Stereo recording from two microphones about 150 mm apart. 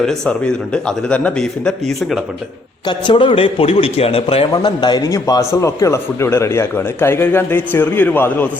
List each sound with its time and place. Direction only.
0.0 s a man's voice: 5° left (ahead or behind)
2.8 s a man's voice: 30° left (ahead or behind); by 8.4 s 15° left (ahead or behind)